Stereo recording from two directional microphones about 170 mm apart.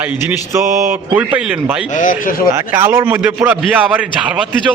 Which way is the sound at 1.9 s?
50° left (ahead or behind).